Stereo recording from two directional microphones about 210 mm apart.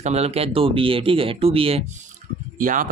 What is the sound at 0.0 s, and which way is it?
Speech, 30° right (ahead or behind).